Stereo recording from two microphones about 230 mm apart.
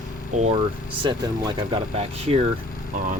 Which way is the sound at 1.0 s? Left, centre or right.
Centre.